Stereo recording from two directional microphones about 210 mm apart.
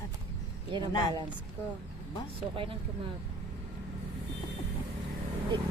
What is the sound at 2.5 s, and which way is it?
Speech, 25° right (ahead or behind).